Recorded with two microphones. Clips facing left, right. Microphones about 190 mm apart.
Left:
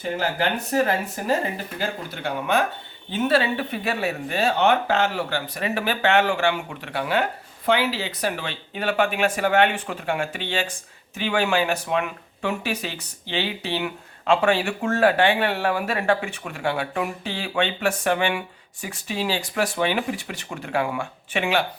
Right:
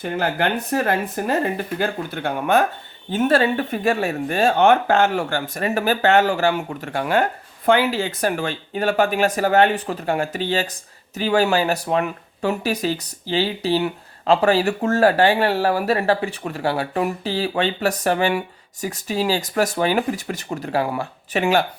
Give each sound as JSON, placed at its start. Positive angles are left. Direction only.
{"t": 0.0, "sound": "speech", "side_deg": -55}